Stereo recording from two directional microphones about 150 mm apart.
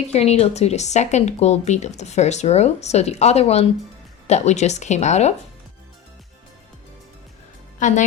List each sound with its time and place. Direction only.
0.1 s a woman's voice: 45° left (ahead or behind)
7.8 s a woman's voice: 55° left (ahead or behind)